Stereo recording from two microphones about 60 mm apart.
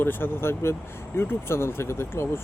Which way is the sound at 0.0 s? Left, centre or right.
Left.